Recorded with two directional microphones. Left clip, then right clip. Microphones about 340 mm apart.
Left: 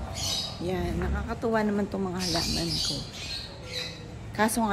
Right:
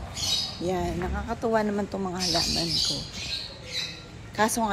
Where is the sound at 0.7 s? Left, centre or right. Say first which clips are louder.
Right 3 dB; centre.